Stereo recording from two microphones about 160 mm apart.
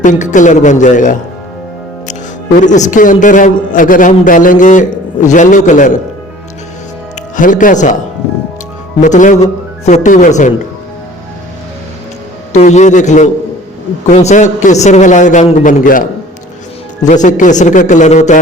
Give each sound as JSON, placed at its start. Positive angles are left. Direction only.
{"t": 0.0, "sound": "a man's voice", "side_deg": 50}
{"t": 2.6, "sound": "a man's voice", "side_deg": 50}
{"t": 7.3, "sound": "a man's voice", "side_deg": 55}
{"t": 9.0, "sound": "a man's voice", "side_deg": 50}
{"t": 12.5, "sound": "a man's voice", "side_deg": 45}